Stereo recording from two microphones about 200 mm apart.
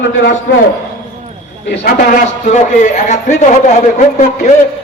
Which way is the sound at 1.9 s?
45° left (ahead or behind).